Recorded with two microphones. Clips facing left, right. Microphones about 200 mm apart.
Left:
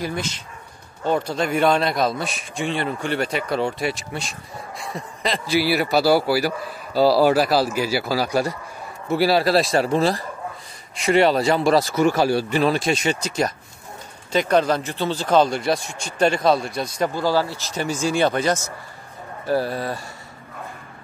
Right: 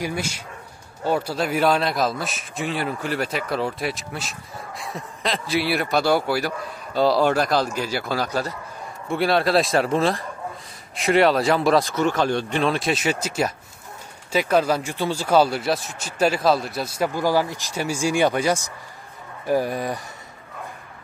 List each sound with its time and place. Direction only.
0.0 s a man's voice: 10° right (ahead or behind)